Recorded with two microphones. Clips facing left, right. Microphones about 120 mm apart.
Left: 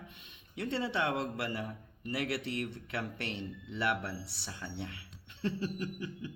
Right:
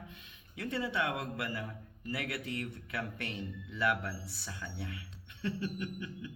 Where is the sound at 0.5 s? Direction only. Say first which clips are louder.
Left 1 dB; 25° left (ahead or behind).